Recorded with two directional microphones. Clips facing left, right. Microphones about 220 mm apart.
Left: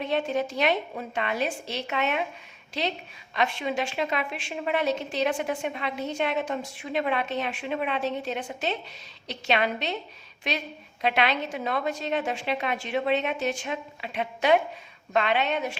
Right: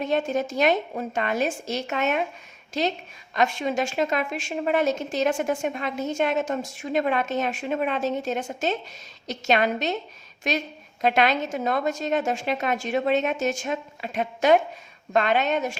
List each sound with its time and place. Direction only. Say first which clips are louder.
0.0 s a woman's voice: right 2 dB; 45° right (ahead or behind)